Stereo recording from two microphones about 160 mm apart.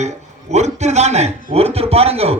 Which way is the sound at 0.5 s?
45° right (ahead or behind).